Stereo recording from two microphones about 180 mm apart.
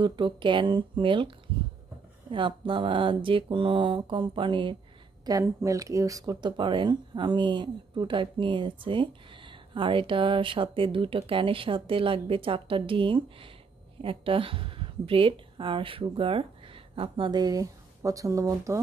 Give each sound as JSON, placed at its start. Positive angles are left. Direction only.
{"t": 0.0, "sound": "speech", "side_deg": -25}
{"t": 2.3, "sound": "a woman's voice", "side_deg": -30}